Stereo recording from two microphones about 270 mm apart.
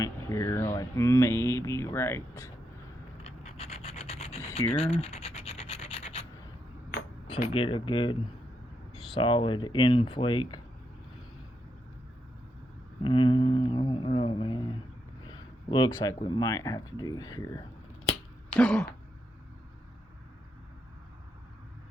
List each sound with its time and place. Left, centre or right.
0.0 s speech: centre
3.2 s scratch: left
7.4 s speech: centre
9.1 s speech: centre
13.0 s a sound: centre
15.3 s speech: centre
18.5 s throat clearing: centre